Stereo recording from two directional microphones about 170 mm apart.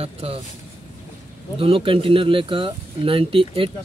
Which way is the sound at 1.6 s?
30° right (ahead or behind).